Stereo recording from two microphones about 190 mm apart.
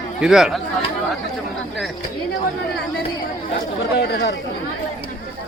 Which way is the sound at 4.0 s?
60° left (ahead or behind).